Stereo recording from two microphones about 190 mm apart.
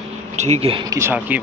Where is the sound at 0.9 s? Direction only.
10° right (ahead or behind).